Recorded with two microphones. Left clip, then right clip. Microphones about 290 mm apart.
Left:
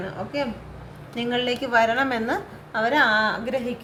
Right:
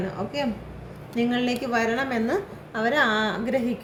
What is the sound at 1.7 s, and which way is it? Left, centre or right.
A woman's voice, left.